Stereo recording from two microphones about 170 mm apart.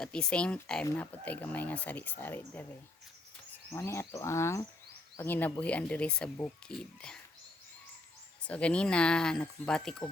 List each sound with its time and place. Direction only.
0.0 s speech: 5° left (ahead or behind)
3.7 s speech: 15° left (ahead or behind)
8.4 s speech: 5° left (ahead or behind)